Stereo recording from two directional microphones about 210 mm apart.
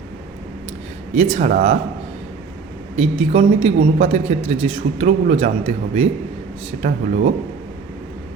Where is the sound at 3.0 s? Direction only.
30° right (ahead or behind).